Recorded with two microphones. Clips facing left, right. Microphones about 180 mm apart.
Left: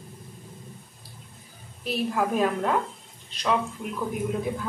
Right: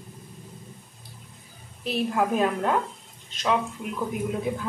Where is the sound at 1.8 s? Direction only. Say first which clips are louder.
Right 1 dB; centre (ahead or behind).